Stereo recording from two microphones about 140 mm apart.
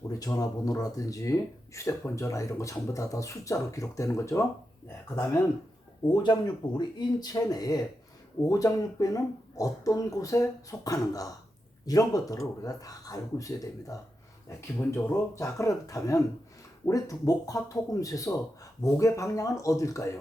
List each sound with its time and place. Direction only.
0.1 s speech: 25° left (ahead or behind)
6.2 s speech: 30° left (ahead or behind)